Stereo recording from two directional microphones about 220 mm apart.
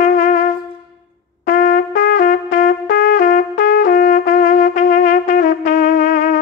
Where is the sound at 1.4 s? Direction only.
35° left (ahead or behind).